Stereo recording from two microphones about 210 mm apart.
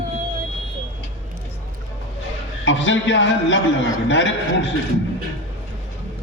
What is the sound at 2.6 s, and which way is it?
A man's voice, 60° left (ahead or behind).